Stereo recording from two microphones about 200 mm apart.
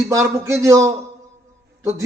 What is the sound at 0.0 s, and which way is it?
A man's voice, 15° right (ahead or behind).